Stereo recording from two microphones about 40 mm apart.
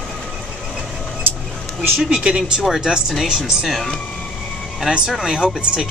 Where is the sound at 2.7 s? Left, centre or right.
Centre.